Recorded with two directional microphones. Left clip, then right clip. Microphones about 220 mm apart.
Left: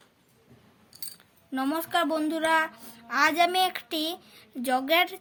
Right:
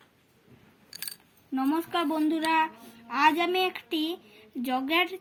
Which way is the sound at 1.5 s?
15° left (ahead or behind).